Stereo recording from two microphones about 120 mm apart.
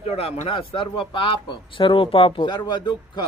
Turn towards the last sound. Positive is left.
turn(degrees=35)  # may be behind; listen again after turning